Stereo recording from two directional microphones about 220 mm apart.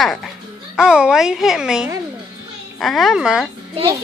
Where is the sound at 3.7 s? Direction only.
25° right (ahead or behind).